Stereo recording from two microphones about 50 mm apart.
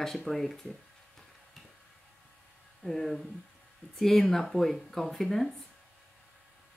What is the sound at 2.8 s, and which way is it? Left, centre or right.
Speech, centre.